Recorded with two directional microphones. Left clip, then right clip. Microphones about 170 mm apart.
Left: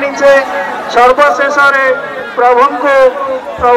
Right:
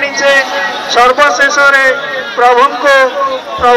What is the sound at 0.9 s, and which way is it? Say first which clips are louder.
Speech: left 1 dB; 65° left (ahead or behind).